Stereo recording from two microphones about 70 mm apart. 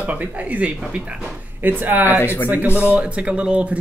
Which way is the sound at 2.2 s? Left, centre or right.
Left.